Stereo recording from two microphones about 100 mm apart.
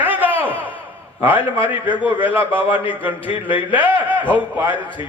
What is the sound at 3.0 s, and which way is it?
Speech, 15° right (ahead or behind).